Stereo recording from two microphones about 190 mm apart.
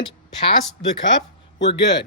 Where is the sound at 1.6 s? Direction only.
65° left (ahead or behind).